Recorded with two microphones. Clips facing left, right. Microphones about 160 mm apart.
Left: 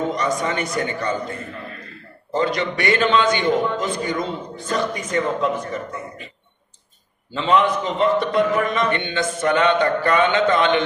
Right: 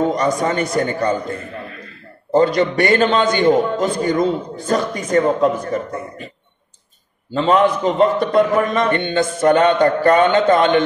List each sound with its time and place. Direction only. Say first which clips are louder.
0.0 s a man's voice: right 5 dB; 40° right (ahead or behind)
2.3 s a man's voice: right 7 dB; 40° right (ahead or behind)
7.3 s a man's voice: right 4 dB; 45° right (ahead or behind)